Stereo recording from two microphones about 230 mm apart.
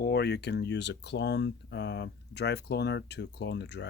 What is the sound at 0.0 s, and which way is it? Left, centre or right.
Speech, left.